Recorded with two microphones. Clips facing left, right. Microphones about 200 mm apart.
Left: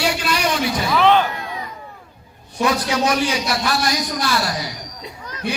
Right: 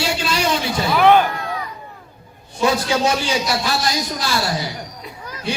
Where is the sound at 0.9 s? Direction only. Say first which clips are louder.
Right 2 dB; 10° right (ahead or behind).